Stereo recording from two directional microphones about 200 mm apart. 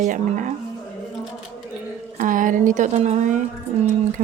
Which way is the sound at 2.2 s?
40° right (ahead or behind).